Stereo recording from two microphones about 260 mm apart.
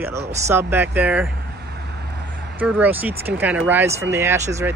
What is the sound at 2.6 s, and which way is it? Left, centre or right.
Speech, centre.